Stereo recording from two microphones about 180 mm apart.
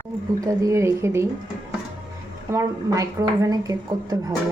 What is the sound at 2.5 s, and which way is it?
A woman's voice, 15° right (ahead or behind).